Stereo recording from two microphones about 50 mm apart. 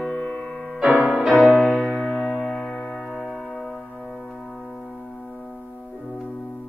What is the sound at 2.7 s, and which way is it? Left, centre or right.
Music, left.